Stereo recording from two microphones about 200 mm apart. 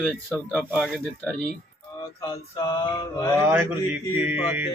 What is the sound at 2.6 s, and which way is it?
Mantra, 20° left (ahead or behind).